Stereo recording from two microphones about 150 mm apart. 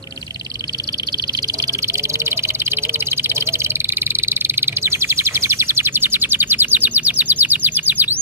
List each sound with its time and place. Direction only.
1.7 s bird: 20° right (ahead or behind)